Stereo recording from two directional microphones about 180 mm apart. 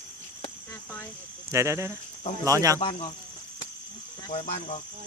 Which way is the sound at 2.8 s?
40° left (ahead or behind).